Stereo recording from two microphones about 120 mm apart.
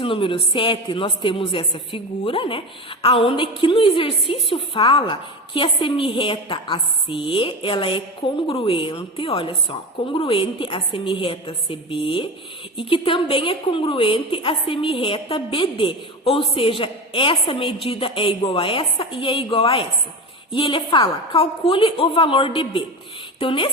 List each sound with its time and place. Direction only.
0.0 s a woman's voice: 45° left (ahead or behind)